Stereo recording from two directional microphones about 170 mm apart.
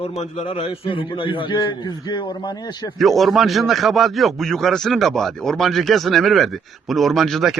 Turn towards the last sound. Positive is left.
turn(degrees=0)  # may be behind; listen again after turning